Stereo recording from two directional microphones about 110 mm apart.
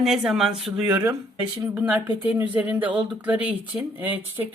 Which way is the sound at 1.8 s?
15° right (ahead or behind).